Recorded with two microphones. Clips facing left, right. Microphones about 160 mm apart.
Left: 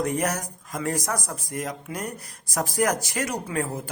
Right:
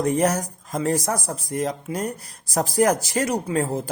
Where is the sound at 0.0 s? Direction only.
30° right (ahead or behind).